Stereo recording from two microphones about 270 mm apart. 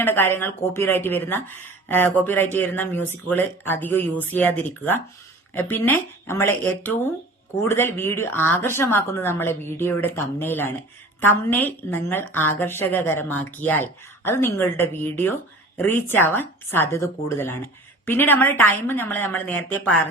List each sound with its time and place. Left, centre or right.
0.0 s a woman's voice: centre